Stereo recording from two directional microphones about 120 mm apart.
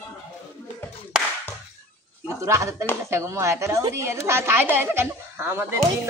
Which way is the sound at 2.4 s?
25° right (ahead or behind).